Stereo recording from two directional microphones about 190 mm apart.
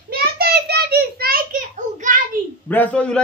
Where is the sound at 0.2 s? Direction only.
55° right (ahead or behind).